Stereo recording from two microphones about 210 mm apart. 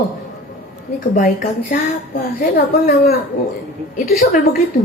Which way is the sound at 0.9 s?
45° left (ahead or behind).